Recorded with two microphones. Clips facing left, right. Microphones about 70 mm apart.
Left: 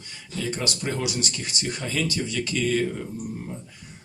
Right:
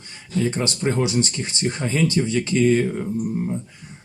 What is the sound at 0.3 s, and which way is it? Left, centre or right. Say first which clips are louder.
Speech: right 6 dB; right.